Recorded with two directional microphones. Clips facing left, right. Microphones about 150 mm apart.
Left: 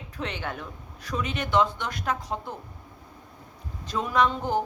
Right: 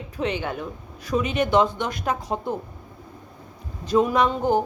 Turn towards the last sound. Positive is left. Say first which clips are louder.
# right 4 dB
turn(degrees=-10)  # may be behind; listen again after turning